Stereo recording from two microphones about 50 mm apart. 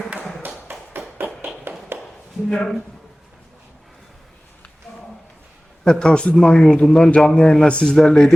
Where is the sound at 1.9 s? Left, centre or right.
Right.